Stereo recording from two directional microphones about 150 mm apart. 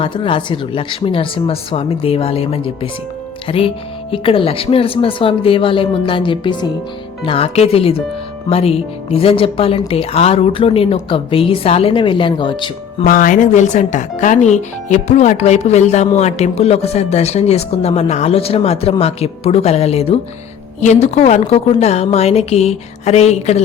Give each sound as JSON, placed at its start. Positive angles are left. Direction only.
{"t": 0.0, "sound": "speech", "side_deg": 35}
{"t": 13.1, "sound": "speech", "side_deg": 65}